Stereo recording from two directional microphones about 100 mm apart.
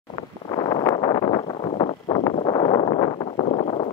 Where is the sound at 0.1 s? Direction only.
50° left (ahead or behind).